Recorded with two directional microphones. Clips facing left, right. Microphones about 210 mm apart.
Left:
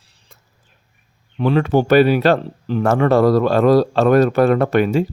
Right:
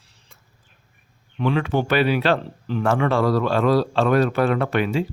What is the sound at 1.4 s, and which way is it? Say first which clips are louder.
Speech: left 6 dB; 40° left (ahead or behind).